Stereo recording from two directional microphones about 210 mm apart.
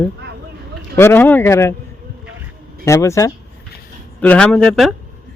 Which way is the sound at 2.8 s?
15° left (ahead or behind).